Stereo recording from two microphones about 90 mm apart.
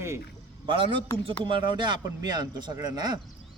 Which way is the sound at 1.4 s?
65° right (ahead or behind).